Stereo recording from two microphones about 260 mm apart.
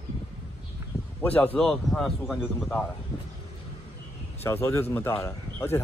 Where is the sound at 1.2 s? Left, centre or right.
Centre.